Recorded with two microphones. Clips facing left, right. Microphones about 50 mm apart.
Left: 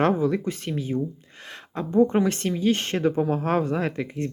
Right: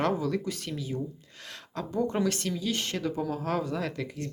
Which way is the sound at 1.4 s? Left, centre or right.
Left.